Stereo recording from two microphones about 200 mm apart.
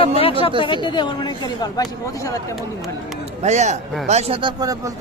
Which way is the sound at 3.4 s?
35° right (ahead or behind).